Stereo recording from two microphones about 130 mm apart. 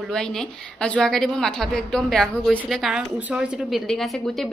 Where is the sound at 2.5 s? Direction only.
10° right (ahead or behind).